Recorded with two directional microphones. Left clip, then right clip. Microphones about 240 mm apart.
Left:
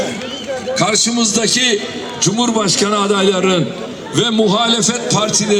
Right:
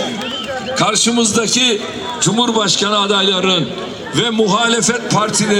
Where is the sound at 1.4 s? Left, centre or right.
Centre.